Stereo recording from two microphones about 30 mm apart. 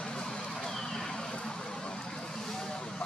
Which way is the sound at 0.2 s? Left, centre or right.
Centre.